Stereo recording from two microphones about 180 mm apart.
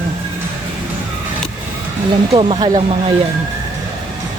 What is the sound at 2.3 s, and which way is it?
Speech, 30° right (ahead or behind).